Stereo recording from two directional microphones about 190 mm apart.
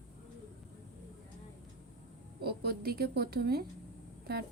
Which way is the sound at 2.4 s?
55° right (ahead or behind).